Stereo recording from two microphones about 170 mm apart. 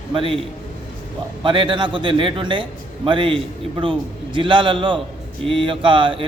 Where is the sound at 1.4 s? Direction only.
30° right (ahead or behind).